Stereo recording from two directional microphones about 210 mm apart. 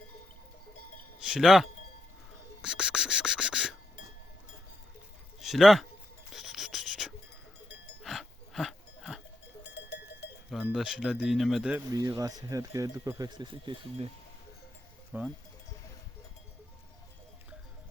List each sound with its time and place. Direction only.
1.2 s speech: centre (ahead or behind)
2.6 s music: 5° right (ahead or behind)
5.4 s a sound: centre (ahead or behind)
9.6 s cowbell: 55° left (ahead or behind)
10.5 s speech: 5° right (ahead or behind)
11.9 s speech: 15° right (ahead or behind)
15.1 s speech: 10° right (ahead or behind)